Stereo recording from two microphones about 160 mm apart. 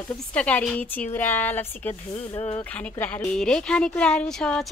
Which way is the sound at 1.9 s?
35° left (ahead or behind).